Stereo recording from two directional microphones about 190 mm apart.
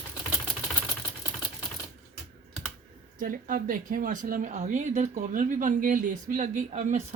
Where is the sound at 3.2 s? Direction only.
45° right (ahead or behind).